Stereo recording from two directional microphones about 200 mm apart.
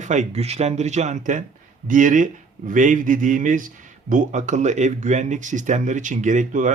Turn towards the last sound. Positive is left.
turn(degrees=-40)  # may be behind; listen again after turning